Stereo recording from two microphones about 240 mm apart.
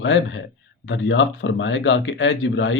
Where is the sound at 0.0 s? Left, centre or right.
Left.